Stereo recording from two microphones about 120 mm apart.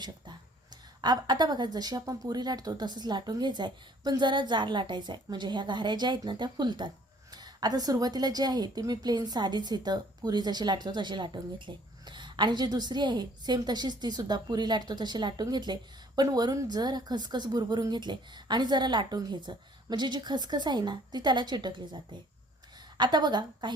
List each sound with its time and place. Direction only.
0.0 s a woman's voice: 35° right (ahead or behind)